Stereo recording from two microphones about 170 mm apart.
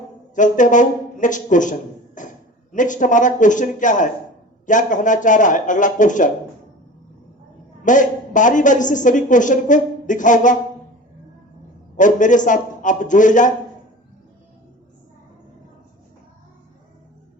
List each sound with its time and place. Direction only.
0.3 s a woman's voice: 50° left (ahead or behind)
2.2 s a sound: 50° left (ahead or behind)
2.7 s a woman's voice: 50° left (ahead or behind)
7.9 s a woman's voice: 50° left (ahead or behind)
11.9 s a woman's voice: 50° left (ahead or behind)